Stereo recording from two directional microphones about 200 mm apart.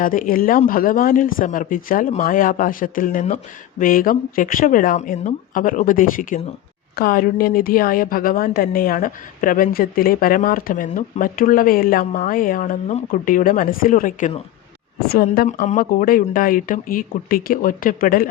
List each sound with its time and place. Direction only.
0.0 s a woman's voice: 45° left (ahead or behind)